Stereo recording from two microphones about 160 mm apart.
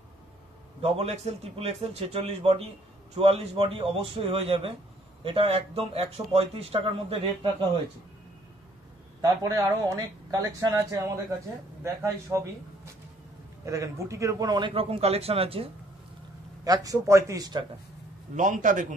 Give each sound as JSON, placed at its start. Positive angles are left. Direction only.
{"t": 0.8, "sound": "a man's voice", "side_deg": -40}
{"t": 9.2, "sound": "speech", "side_deg": -20}
{"t": 13.7, "sound": "a man's voice", "side_deg": -20}
{"t": 16.6, "sound": "speech", "side_deg": -20}
{"t": 18.3, "sound": "a man's voice", "side_deg": -55}